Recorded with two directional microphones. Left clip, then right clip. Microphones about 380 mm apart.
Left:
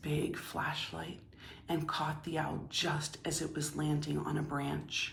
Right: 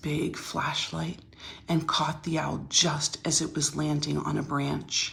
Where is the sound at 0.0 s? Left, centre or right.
Centre.